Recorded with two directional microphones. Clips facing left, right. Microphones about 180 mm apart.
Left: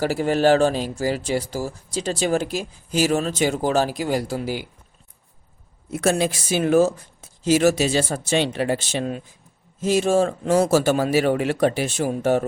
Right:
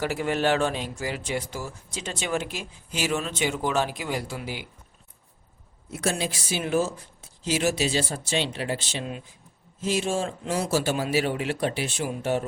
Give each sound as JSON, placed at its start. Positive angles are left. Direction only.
{"t": 0.0, "sound": "speech", "side_deg": 35}
{"t": 5.9, "sound": "speech", "side_deg": 50}